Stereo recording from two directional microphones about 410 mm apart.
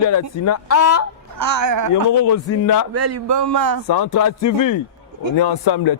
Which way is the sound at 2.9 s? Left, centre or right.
Right.